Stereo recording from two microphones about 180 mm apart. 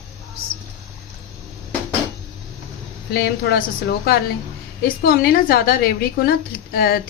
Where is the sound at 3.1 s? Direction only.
60° left (ahead or behind).